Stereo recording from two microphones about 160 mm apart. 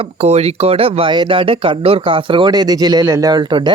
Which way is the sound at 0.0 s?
40° right (ahead or behind).